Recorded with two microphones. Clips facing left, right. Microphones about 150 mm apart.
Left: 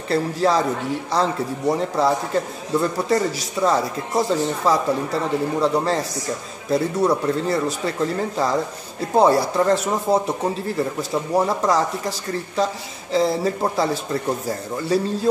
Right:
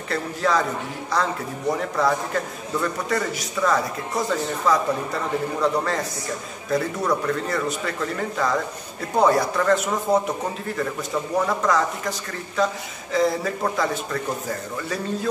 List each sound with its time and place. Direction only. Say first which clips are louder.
0.1 s a man's voice: left 4 dB; 30° left (ahead or behind)
1.8 s a man's voice: left 2 dB; 30° left (ahead or behind)